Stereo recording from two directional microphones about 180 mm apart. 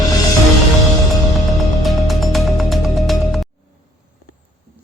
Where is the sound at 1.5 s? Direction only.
Centre (ahead or behind).